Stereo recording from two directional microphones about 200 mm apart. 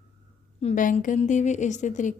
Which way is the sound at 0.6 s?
35° left (ahead or behind).